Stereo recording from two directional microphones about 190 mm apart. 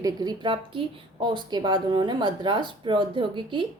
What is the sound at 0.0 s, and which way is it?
A woman's voice, 20° right (ahead or behind).